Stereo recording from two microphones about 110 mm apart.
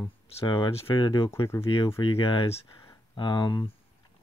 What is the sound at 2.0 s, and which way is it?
Speech, 50° left (ahead or behind).